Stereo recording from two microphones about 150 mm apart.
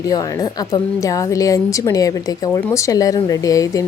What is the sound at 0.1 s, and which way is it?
A woman's voice, 25° left (ahead or behind).